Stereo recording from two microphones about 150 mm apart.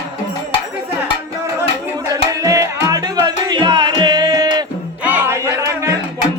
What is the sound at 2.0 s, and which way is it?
Music, 20° right (ahead or behind).